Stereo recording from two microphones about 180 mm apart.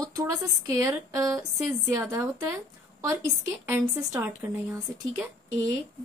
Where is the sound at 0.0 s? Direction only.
20° right (ahead or behind).